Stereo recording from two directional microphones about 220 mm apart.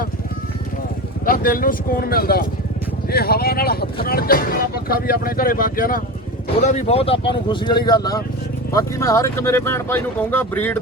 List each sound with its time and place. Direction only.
1.2 s speech: 40° left (ahead or behind); by 10.8 s 10° left (ahead or behind)